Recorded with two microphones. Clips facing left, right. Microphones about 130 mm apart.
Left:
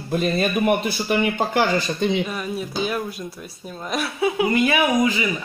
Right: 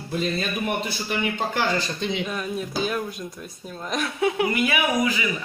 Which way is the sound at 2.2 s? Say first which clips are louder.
Left 1 dB; 5° left (ahead or behind).